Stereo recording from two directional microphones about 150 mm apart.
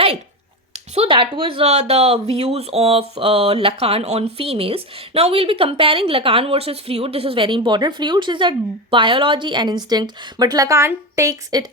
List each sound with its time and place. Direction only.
0.7 s speech: 40° right (ahead or behind); by 11.6 s 20° right (ahead or behind)